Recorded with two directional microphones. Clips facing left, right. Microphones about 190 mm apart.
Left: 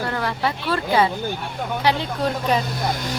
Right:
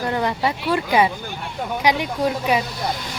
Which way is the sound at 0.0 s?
20° right (ahead or behind).